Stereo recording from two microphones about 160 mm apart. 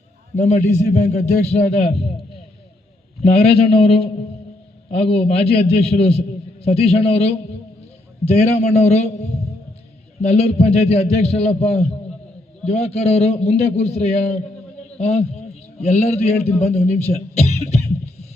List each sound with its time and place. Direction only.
0.3 s a man's voice: 45° left (ahead or behind)
3.2 s a man's voice: 40° left (ahead or behind)